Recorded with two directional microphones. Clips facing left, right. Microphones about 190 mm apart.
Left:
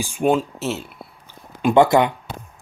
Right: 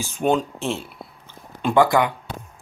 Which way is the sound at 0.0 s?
10° left (ahead or behind).